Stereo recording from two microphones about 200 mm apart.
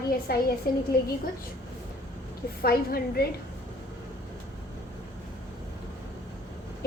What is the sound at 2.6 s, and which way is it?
Speech, 50° left (ahead or behind).